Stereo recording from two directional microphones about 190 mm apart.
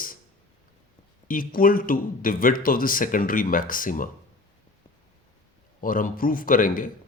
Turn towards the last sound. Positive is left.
turn(degrees=45)  # may be behind; listen again after turning